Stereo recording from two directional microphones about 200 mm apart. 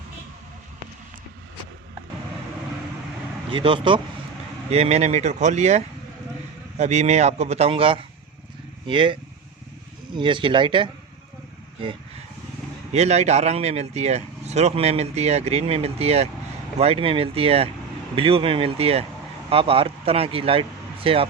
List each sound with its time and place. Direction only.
3.5 s speech: 25° right (ahead or behind)
10.2 s speech: 25° right (ahead or behind)
12.9 s speech: 35° right (ahead or behind)